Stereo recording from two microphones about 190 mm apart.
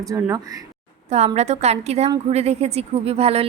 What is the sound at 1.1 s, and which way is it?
A woman's voice, 35° right (ahead or behind).